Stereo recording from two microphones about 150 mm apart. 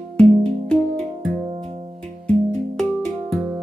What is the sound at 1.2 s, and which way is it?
Music, 55° right (ahead or behind).